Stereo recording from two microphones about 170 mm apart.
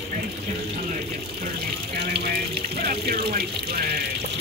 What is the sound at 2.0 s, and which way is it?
Water, 75° right (ahead or behind).